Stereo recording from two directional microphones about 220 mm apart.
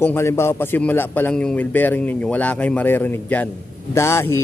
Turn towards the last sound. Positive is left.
turn(degrees=10)  # may be behind; listen again after turning